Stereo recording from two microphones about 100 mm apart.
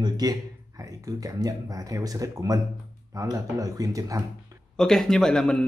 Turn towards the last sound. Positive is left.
turn(degrees=5)  # may be behind; listen again after turning